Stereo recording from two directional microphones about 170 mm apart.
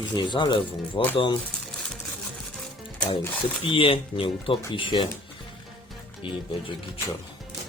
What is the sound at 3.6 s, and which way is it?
Speech, 30° left (ahead or behind).